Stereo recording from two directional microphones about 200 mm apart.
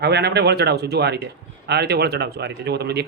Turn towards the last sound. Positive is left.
turn(degrees=-55)  # may be behind; listen again after turning